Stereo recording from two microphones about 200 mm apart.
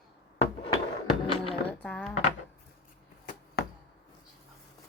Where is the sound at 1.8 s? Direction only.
5° left (ahead or behind).